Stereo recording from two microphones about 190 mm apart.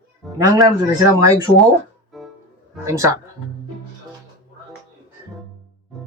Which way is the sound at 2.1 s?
Centre (ahead or behind).